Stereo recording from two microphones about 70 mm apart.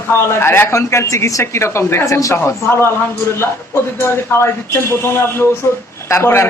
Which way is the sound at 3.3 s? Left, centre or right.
Left.